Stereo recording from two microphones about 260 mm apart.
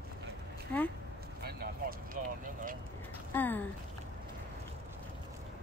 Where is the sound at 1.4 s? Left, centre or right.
Right.